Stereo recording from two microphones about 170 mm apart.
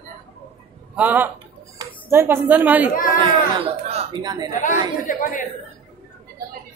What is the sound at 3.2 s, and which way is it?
A woman's voice, 30° right (ahead or behind).